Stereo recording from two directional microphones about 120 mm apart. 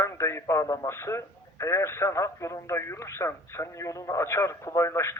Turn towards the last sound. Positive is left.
turn(degrees=25)  # may be behind; listen again after turning